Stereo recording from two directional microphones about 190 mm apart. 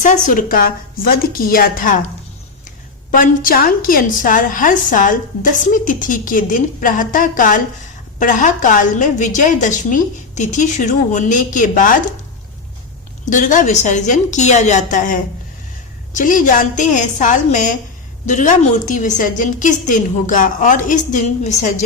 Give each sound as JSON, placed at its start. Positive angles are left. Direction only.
{"t": 0.0, "sound": "a woman's voice", "side_deg": 45}
{"t": 3.1, "sound": "a woman's voice", "side_deg": 50}
{"t": 13.3, "sound": "a woman's voice", "side_deg": 40}